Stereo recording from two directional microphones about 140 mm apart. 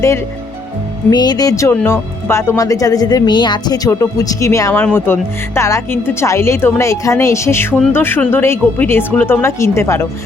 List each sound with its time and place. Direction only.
1.1 s speech: 30° left (ahead or behind)